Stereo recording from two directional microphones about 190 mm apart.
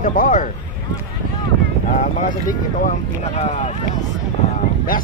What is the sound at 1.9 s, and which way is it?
Speech, 45° left (ahead or behind).